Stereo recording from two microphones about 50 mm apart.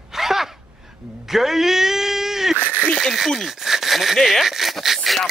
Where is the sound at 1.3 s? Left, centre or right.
Centre.